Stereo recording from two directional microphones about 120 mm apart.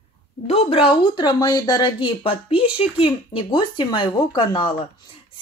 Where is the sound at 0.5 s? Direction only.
55° left (ahead or behind).